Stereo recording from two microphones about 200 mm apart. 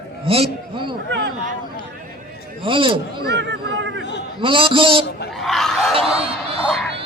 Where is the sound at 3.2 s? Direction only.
60° right (ahead or behind).